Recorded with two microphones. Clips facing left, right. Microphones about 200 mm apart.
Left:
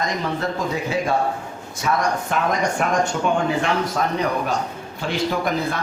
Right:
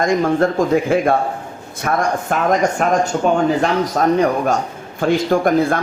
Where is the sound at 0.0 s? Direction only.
50° right (ahead or behind).